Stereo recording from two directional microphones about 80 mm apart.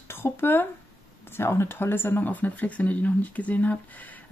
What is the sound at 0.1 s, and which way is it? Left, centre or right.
Speech, left.